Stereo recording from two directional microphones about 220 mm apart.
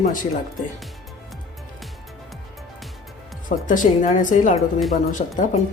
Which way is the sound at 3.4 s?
35° left (ahead or behind).